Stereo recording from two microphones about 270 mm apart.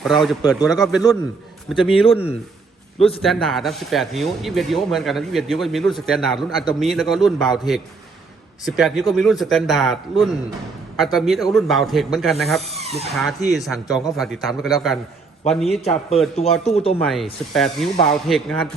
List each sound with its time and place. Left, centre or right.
0.0 s speech: centre
2.0 s a man's voice: left
3.2 s speech: centre
8.6 s speech: centre
12.7 s speech: right
13.1 s speech: centre
15.6 s a man's voice: left
17.0 s speech: centre